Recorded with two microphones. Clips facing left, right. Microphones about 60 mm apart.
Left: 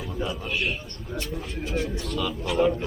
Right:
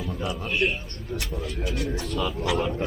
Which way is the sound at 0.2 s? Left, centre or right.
Centre.